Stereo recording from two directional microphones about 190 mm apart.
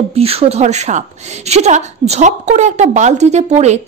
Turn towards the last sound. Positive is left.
turn(degrees=-35)  # may be behind; listen again after turning